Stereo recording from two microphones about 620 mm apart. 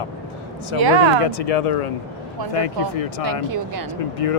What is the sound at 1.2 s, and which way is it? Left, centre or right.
Speech, left.